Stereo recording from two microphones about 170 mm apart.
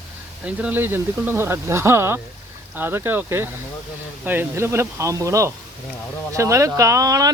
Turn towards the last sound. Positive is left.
turn(degrees=-20)  # may be behind; listen again after turning